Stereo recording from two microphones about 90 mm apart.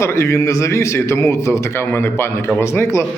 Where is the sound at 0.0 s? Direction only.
30° left (ahead or behind).